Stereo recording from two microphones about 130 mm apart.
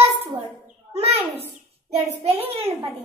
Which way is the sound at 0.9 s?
50° right (ahead or behind).